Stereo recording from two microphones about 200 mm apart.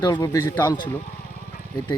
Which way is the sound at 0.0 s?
15° left (ahead or behind).